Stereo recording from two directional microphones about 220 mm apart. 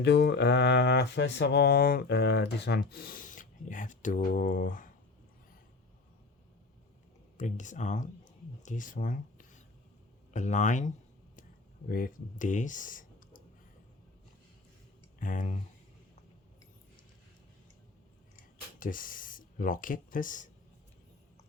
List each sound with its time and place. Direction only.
0.0 s speech: 50° left (ahead or behind)
7.3 s speech: 35° left (ahead or behind)
15.2 s speech: 35° left (ahead or behind)
18.8 s speech: 40° left (ahead or behind)